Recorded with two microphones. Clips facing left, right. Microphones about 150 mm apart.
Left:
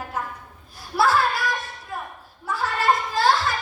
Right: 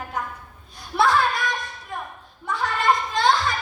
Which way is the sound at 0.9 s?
5° left (ahead or behind).